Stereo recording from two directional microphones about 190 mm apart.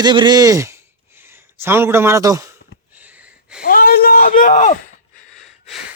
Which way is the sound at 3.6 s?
50° left (ahead or behind).